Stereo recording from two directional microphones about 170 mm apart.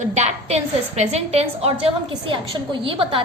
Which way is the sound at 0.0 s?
40° right (ahead or behind).